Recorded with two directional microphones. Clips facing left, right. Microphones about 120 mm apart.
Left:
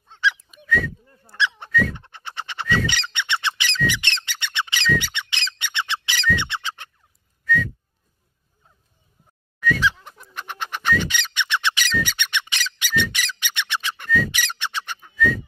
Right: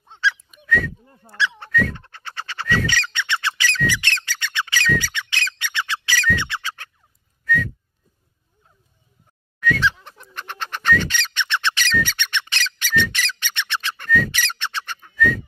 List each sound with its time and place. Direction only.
0.5 s a sound: 5° left (ahead or behind)
1.0 s speech: 25° right (ahead or behind)
1.3 s speech: 15° left (ahead or behind)
2.0 s squawk: 20° left (ahead or behind)
7.4 s whistling: centre (ahead or behind)
9.6 s fowl: 10° left (ahead or behind)
10.0 s bird: 10° left (ahead or behind)